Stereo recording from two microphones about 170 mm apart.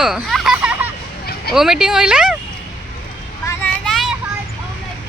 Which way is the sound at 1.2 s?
65° left (ahead or behind).